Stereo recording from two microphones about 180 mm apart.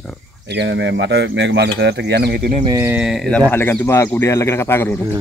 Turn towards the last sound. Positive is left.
turn(degrees=15)  # may be behind; listen again after turning